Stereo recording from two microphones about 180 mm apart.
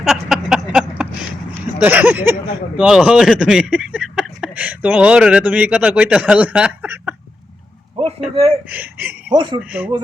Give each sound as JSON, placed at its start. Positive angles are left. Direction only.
{"t": 0.0, "sound": "a sound", "side_deg": 0}
{"t": 1.8, "sound": "speech", "side_deg": -10}
{"t": 8.7, "sound": "speech", "side_deg": -10}
{"t": 9.3, "sound": "speech", "side_deg": -25}
{"t": 9.6, "sound": "speech", "side_deg": -10}